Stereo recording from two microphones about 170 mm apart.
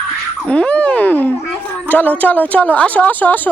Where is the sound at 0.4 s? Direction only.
5° left (ahead or behind).